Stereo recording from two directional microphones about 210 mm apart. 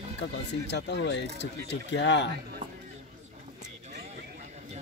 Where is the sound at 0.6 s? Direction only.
55° left (ahead or behind).